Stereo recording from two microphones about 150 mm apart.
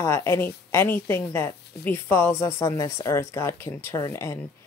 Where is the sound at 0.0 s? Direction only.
15° left (ahead or behind).